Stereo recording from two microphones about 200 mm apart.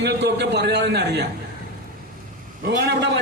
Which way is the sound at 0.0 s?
60° right (ahead or behind).